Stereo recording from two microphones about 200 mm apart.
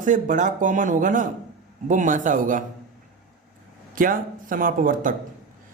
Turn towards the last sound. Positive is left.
turn(degrees=-45)  # may be behind; listen again after turning